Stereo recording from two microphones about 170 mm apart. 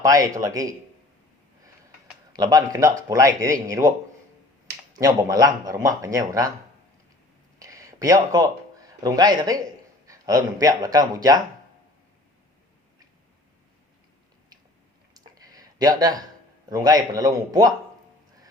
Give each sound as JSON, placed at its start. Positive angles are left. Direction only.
{"t": 0.0, "sound": "speech", "side_deg": -20}
{"t": 2.3, "sound": "speech", "side_deg": -20}
{"t": 4.9, "sound": "speech", "side_deg": -20}
{"t": 7.6, "sound": "a sound", "side_deg": -20}
{"t": 10.1, "sound": "speech", "side_deg": -20}
{"t": 15.1, "sound": "a sound", "side_deg": -20}
{"t": 16.6, "sound": "speech", "side_deg": -25}